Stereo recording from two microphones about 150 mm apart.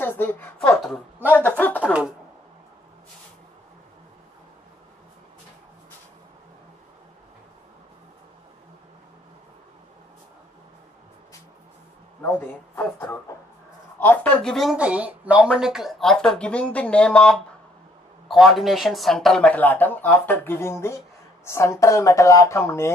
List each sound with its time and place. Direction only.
0.0 s a woman's voice: 15° left (ahead or behind)
12.2 s a sound: 10° left (ahead or behind)
13.9 s speech: 10° left (ahead or behind)